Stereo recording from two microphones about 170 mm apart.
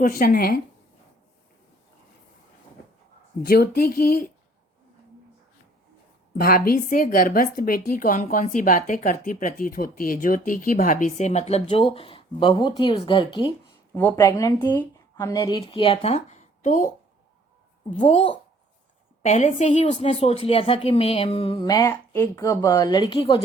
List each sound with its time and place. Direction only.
0.0 s speech: 55° left (ahead or behind)
3.4 s speech: 65° left (ahead or behind)
6.4 s a woman's voice: 55° left (ahead or behind); by 13.5 s 30° left (ahead or behind)
13.9 s speech: 15° left (ahead or behind); by 16.9 s 45° left (ahead or behind)
17.9 s a woman's voice: 40° left (ahead or behind)